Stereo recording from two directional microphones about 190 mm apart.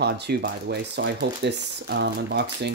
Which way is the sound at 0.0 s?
60° right (ahead or behind).